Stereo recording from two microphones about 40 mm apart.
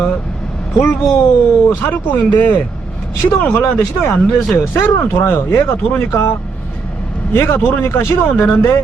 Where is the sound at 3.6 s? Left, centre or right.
Left.